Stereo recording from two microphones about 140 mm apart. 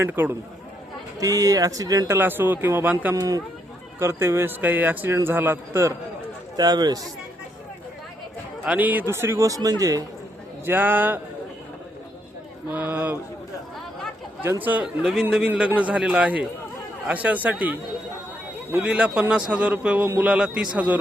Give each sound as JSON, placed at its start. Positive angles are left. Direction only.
{"t": 0.0, "sound": "a man's voice", "side_deg": -15}
{"t": 3.2, "sound": "a man's voice", "side_deg": -25}
{"t": 6.6, "sound": "a man's voice", "side_deg": -30}
{"t": 8.6, "sound": "a man's voice", "side_deg": -10}
{"t": 10.7, "sound": "a man's voice", "side_deg": -15}
{"t": 12.7, "sound": "a man's voice", "side_deg": -10}
{"t": 14.4, "sound": "a man's voice", "side_deg": -15}